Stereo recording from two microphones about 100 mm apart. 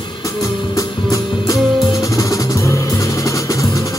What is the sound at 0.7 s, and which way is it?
Music, 35° left (ahead or behind).